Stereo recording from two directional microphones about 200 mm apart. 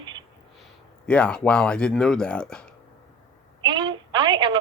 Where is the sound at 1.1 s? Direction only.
5° left (ahead or behind).